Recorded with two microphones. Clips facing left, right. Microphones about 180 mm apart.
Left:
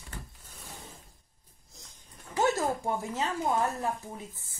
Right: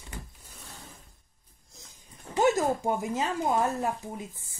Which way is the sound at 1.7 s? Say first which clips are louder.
Right 1 dB; centre (ahead or behind).